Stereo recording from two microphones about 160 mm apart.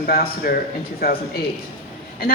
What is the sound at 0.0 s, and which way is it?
A woman's voice, 70° left (ahead or behind).